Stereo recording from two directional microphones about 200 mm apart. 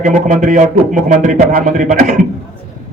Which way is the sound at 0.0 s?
40° right (ahead or behind).